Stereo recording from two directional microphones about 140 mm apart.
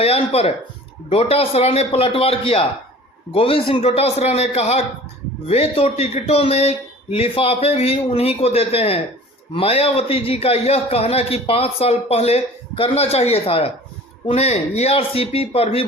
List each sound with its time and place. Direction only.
0.0 s a man's voice: 45° left (ahead or behind)